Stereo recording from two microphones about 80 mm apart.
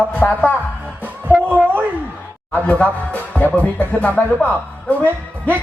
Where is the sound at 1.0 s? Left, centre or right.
Right.